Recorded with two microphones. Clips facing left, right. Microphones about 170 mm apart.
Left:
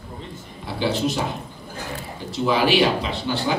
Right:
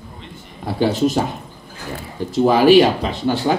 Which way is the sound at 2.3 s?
45° right (ahead or behind).